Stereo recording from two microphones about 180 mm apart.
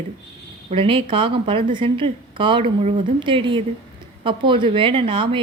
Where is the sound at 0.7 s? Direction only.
30° right (ahead or behind).